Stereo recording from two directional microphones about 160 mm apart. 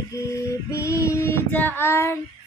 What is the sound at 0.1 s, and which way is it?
Child singing, 20° left (ahead or behind).